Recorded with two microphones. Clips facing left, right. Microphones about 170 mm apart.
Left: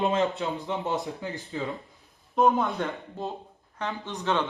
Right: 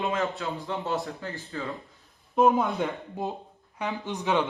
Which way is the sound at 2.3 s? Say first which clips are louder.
Right 1 dB; centre (ahead or behind).